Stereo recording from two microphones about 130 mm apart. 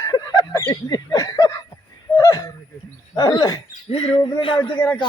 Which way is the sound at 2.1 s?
25° left (ahead or behind).